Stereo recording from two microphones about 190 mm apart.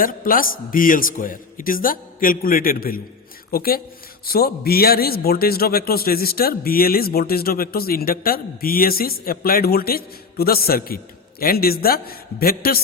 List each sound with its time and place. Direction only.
0.0 s a man's voice: 45° left (ahead or behind)